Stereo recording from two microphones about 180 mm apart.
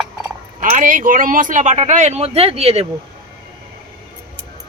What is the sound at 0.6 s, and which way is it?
Speech, 45° right (ahead or behind).